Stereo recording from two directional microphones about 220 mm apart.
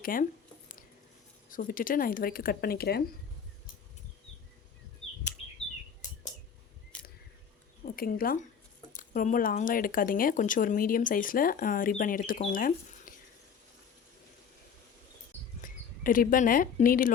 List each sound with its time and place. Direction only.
0.0 s speech: 40° left (ahead or behind)
1.5 s speech: 35° left (ahead or behind)
7.9 s speech: 40° left (ahead or behind)
15.6 s speech: 40° left (ahead or behind)